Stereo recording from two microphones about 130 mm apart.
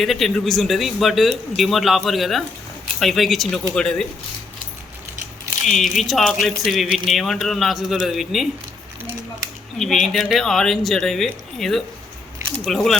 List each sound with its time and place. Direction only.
0.0 s a man's voice: centre (ahead or behind)
5.6 s a man's voice: centre (ahead or behind)
9.7 s a man's voice: 5° left (ahead or behind)